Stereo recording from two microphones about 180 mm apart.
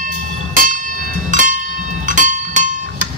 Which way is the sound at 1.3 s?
45° right (ahead or behind).